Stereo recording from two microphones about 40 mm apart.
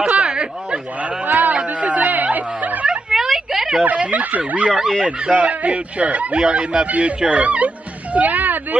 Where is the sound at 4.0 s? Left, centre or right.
Right.